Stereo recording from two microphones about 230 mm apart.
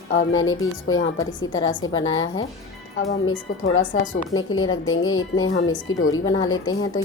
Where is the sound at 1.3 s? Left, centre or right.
Centre.